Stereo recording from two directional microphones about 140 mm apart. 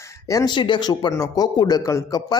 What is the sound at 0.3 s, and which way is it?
Speech, 30° left (ahead or behind).